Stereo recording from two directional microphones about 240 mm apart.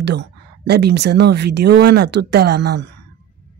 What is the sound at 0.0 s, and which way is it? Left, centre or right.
Speech, right.